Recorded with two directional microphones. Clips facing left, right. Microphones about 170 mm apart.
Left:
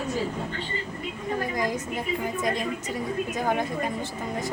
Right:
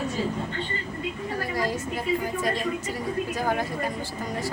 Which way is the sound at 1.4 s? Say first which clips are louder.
Even; 20° left (ahead or behind).